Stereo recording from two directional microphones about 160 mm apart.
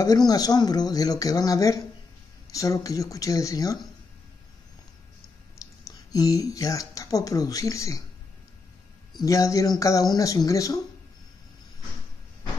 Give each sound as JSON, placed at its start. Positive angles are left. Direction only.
{"t": 0.3, "sound": "speech", "side_deg": 25}
{"t": 5.9, "sound": "speech", "side_deg": 20}
{"t": 9.2, "sound": "speech", "side_deg": 20}